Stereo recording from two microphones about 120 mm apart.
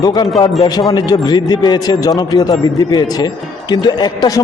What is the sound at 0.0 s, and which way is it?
A man's voice, 35° left (ahead or behind).